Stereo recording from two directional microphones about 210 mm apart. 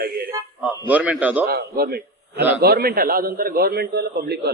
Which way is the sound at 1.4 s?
45° right (ahead or behind).